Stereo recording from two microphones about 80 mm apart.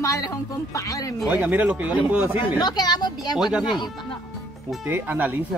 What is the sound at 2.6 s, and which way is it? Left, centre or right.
Speech, left.